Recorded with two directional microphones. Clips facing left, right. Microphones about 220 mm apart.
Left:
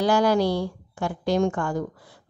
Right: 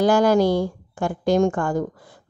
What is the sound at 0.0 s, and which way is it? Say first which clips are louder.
A woman's voice: right 4 dB; 45° right (ahead or behind).